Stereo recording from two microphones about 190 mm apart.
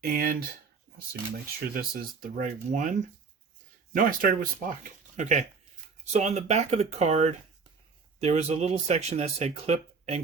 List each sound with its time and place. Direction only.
0.0 s speech: 50° right (ahead or behind)
1.7 s speech: 50° right (ahead or behind); by 10.2 s 35° right (ahead or behind)